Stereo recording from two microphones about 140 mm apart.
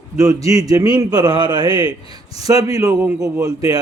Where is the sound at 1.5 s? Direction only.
40° left (ahead or behind).